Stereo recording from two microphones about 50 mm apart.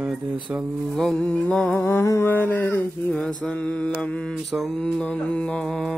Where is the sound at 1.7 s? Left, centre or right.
Left.